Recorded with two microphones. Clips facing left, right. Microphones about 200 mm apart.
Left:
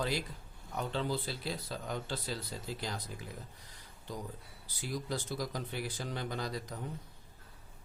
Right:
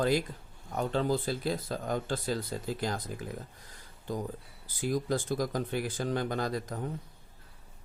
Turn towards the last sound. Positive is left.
turn(degrees=-50)  # may be behind; listen again after turning